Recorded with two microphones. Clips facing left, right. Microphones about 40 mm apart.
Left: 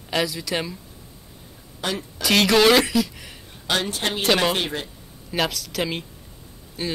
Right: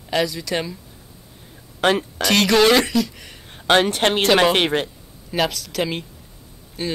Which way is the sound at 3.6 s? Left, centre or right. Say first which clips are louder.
Right 8 dB; right.